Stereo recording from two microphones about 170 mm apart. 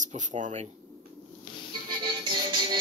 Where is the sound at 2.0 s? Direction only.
30° right (ahead or behind).